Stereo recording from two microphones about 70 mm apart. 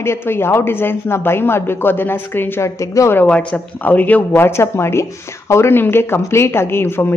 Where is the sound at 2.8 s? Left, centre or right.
Left.